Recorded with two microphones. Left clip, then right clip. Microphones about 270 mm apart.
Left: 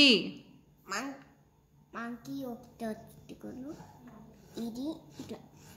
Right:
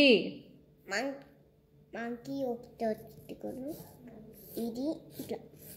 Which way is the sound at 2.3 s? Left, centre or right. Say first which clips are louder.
Right 6 dB; centre.